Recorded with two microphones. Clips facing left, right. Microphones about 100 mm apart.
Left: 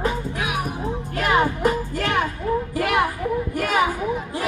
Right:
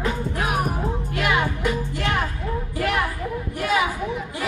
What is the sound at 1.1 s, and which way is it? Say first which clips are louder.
Music: left 4 dB; 35° left (ahead or behind).